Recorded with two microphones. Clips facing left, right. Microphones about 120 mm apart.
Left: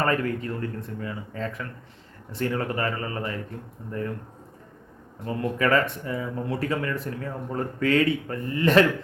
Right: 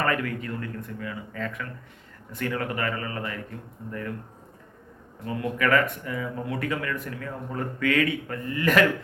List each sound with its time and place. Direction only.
0.0 s speech: 30° left (ahead or behind)
5.2 s speech: 30° left (ahead or behind)